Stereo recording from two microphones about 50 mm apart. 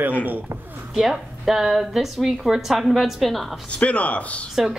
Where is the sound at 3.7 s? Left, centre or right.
Left.